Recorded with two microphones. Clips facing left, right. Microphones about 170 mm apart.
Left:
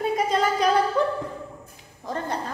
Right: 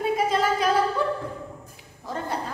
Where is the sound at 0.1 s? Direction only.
5° right (ahead or behind).